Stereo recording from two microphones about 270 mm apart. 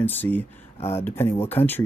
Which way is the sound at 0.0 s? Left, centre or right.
Centre.